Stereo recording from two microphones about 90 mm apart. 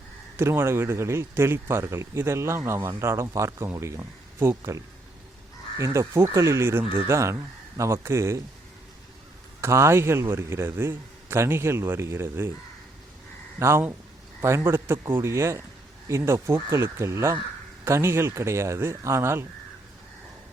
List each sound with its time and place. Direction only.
0.3 s speech: 30° right (ahead or behind)
9.6 s speech: 30° right (ahead or behind)
13.6 s speech: 30° right (ahead or behind)